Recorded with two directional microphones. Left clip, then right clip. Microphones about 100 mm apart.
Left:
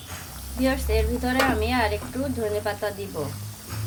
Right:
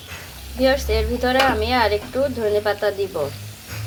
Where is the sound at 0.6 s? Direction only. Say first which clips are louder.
Right 6 dB; 20° right (ahead or behind).